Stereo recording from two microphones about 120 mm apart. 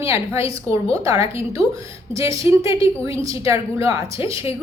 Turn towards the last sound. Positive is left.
turn(degrees=-25)  # may be behind; listen again after turning